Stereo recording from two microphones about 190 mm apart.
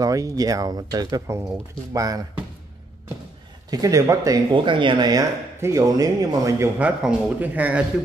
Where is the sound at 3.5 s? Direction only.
20° right (ahead or behind).